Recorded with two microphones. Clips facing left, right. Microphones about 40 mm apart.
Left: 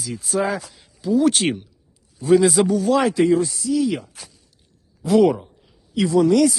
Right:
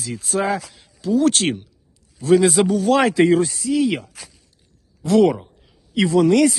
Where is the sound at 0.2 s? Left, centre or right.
Centre.